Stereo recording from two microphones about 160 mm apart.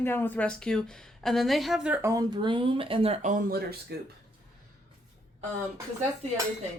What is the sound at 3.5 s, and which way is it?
Speech, 80° right.